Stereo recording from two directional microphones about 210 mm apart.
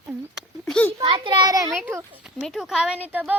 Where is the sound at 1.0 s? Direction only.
25° right (ahead or behind).